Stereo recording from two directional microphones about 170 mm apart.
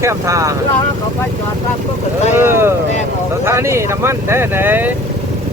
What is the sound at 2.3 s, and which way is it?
Speech, 15° right (ahead or behind).